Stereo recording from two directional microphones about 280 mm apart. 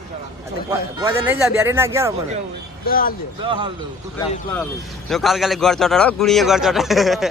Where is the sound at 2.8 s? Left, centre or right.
Left.